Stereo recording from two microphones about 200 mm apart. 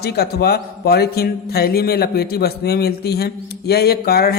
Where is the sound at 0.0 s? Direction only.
50° left (ahead or behind).